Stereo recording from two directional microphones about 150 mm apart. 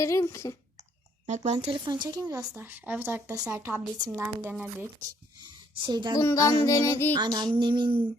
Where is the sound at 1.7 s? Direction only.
30° right (ahead or behind).